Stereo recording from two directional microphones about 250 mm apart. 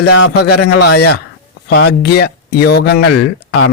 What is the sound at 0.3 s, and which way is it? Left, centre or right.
Speech, left.